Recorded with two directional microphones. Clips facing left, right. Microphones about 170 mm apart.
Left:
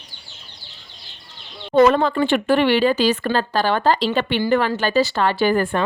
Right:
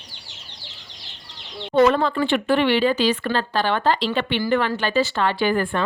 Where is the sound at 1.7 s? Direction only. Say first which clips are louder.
Left 2 dB; 40° left (ahead or behind).